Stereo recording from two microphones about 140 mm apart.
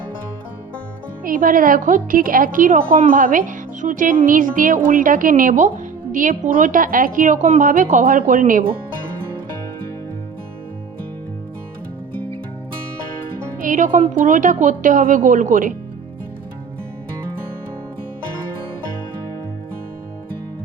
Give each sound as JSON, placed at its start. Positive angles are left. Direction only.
{"t": 1.2, "sound": "a woman's voice", "side_deg": -80}
{"t": 13.6, "sound": "music", "side_deg": -70}
{"t": 14.3, "sound": "a woman's voice", "side_deg": -65}